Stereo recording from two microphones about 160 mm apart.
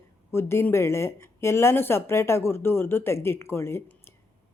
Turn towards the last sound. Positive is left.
turn(degrees=15)  # may be behind; listen again after turning